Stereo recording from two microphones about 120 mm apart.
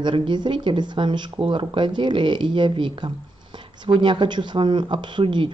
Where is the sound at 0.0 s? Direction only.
40° right (ahead or behind).